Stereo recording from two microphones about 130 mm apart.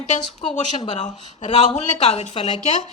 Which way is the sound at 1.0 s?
65° left (ahead or behind).